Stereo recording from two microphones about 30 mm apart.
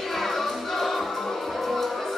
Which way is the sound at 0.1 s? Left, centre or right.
Centre.